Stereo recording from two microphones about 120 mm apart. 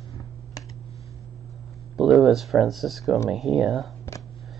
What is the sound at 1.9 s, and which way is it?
Speech, 5° right (ahead or behind).